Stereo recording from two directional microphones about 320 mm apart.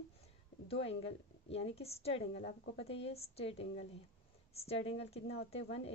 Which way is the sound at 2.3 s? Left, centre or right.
Left.